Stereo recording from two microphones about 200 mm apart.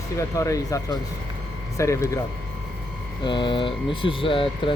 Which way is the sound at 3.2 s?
25° left (ahead or behind).